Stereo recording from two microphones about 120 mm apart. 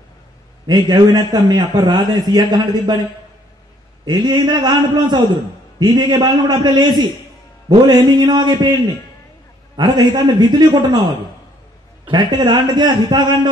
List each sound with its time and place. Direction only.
0.7 s a man's voice: 35° right (ahead or behind)
4.0 s a man's voice: 35° right (ahead or behind)
9.8 s a man's voice: 35° right (ahead or behind)